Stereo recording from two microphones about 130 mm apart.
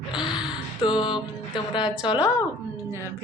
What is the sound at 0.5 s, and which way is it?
Speech, 35° left (ahead or behind).